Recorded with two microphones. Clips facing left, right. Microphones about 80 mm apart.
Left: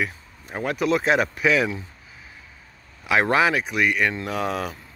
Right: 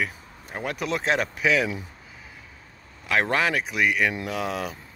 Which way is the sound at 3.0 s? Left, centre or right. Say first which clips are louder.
Left 4 dB; centre.